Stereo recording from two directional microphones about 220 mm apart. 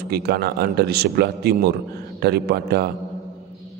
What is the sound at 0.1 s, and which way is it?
A man's voice, 45° right (ahead or behind).